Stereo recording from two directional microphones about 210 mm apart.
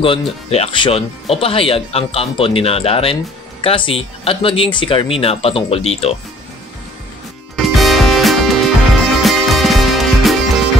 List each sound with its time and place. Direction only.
0.0 s speech: 25° left (ahead or behind)
7.5 s music: centre (ahead or behind)